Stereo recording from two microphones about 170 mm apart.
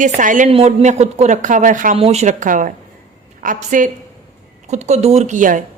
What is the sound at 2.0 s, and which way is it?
A woman's voice, 40° right (ahead or behind).